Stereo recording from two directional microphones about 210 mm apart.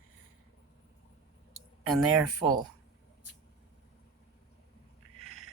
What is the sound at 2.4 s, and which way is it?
Speech, 20° right (ahead or behind).